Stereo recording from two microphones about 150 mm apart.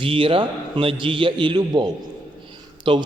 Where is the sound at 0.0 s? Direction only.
35° right (ahead or behind).